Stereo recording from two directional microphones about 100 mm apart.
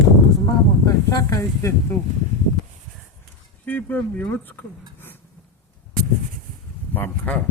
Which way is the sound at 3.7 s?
20° left (ahead or behind).